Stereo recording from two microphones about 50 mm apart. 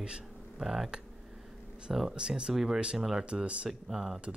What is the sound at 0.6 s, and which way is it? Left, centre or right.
Speech, centre.